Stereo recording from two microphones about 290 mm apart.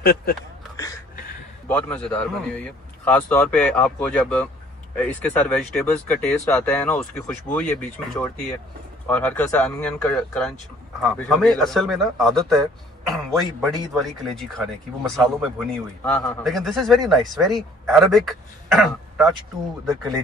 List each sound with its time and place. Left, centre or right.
0.0 s speech: left
1.7 s speech: centre